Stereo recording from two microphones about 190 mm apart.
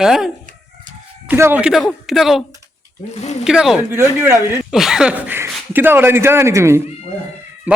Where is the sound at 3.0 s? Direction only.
35° left (ahead or behind).